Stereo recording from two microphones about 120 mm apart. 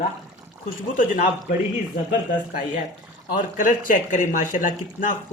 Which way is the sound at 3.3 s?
90° left.